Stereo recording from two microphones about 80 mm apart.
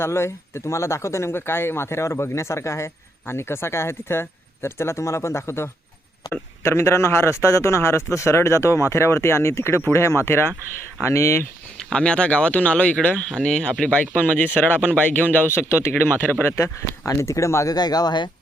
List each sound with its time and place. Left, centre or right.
0.0 s speech: left
11.9 s speech: centre; by 17.7 s left
17.7 s speech: left